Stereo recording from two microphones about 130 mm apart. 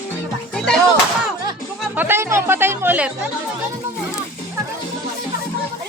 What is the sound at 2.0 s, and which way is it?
Music, 20° right (ahead or behind).